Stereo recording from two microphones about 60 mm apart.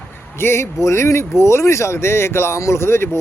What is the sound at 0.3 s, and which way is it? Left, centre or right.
Speech, left.